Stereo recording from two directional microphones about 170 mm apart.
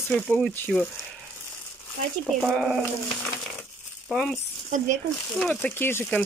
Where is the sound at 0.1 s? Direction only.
5° left (ahead or behind).